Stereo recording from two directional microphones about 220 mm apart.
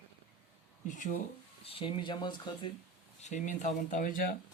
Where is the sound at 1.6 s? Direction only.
25° left (ahead or behind).